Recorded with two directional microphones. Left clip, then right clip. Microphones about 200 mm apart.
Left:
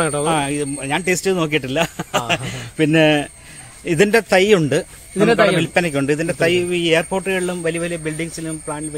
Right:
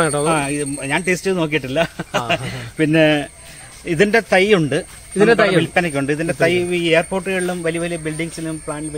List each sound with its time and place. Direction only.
0.2 s speech: 35° left (ahead or behind); by 4.8 s 60° left (ahead or behind)
5.1 s speech: centre (ahead or behind)
5.6 s speech: 60° left (ahead or behind); by 8.8 s 35° left (ahead or behind)